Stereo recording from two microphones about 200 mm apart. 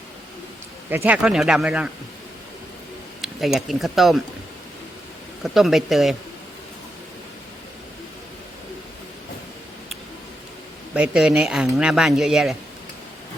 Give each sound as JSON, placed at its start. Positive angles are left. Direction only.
{"t": 0.9, "sound": "speech", "side_deg": -10}
{"t": 3.2, "sound": "speech", "side_deg": 0}
{"t": 5.4, "sound": "speech", "side_deg": 0}
{"t": 10.9, "sound": "speech", "side_deg": -5}